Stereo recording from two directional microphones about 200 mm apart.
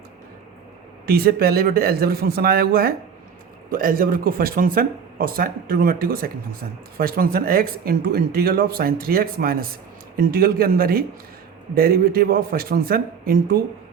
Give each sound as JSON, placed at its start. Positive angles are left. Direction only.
{"t": 1.0, "sound": "speech", "side_deg": -50}